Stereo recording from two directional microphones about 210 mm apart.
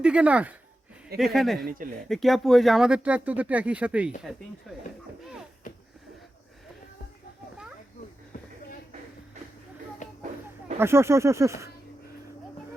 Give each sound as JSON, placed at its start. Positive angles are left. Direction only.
{"t": 0.0, "sound": "speech", "side_deg": -5}
{"t": 1.6, "sound": "speech", "side_deg": -40}
{"t": 2.0, "sound": "speech", "side_deg": 0}
{"t": 5.7, "sound": "a sound", "side_deg": 40}
{"t": 10.8, "sound": "speech", "side_deg": -10}